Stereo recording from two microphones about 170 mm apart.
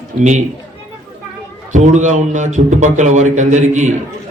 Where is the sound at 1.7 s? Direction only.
45° right (ahead or behind).